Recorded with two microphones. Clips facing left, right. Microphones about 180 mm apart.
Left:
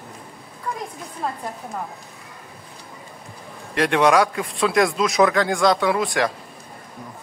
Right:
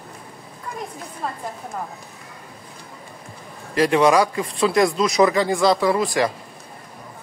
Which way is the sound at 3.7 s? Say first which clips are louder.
Right 1 dB; centre (ahead or behind).